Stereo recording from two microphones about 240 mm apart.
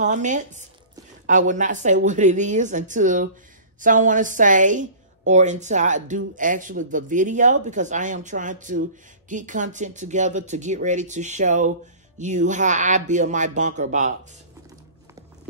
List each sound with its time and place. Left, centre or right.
0.0 s a woman's voice: right